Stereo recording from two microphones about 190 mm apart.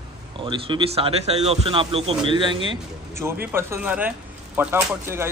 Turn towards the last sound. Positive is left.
turn(degrees=-15)  # may be behind; listen again after turning